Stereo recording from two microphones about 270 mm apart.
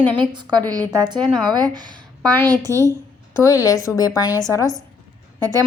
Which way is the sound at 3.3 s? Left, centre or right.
Centre.